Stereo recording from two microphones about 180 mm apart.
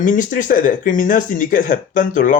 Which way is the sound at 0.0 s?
45° left (ahead or behind).